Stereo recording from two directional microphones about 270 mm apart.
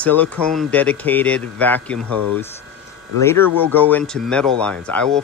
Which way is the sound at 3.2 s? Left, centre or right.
Centre.